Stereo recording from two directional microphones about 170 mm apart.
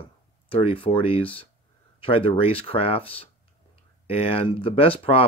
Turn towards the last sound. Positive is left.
turn(degrees=35)  # may be behind; listen again after turning